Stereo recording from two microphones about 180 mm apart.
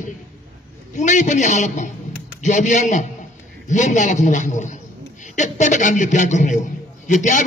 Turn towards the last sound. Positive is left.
turn(degrees=45)  # may be behind; listen again after turning